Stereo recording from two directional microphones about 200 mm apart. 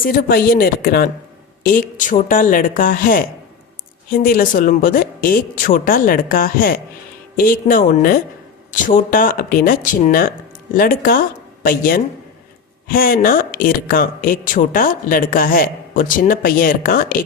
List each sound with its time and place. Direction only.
0.0 s speech: 45° left (ahead or behind)